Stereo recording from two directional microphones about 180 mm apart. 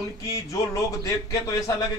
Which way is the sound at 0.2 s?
20° left (ahead or behind).